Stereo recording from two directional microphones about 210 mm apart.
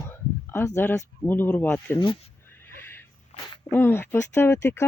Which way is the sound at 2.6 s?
10° left (ahead or behind).